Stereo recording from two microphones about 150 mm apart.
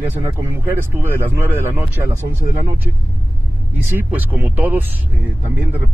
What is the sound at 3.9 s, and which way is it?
Speech, 15° right (ahead or behind).